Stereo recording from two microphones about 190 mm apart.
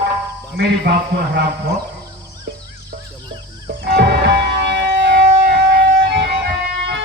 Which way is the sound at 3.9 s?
65° right (ahead or behind).